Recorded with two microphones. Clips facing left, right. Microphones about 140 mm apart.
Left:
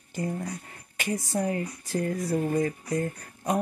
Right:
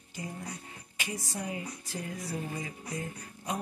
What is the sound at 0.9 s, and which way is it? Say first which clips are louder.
Speech: left 9 dB; 55° left (ahead or behind).